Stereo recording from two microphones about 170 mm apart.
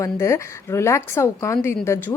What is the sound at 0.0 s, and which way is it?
Speech, 15° left (ahead or behind).